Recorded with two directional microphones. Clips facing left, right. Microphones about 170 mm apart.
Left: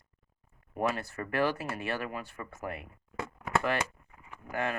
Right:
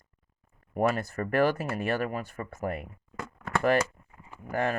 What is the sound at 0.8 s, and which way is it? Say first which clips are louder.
Speech: right 5 dB; 45° right (ahead or behind).